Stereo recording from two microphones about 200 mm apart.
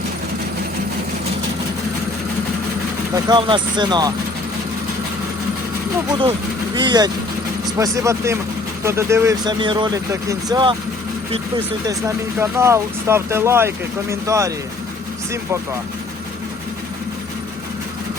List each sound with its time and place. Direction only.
3.2 s speech: 25° right (ahead or behind)
6.7 s speech: 20° right (ahead or behind)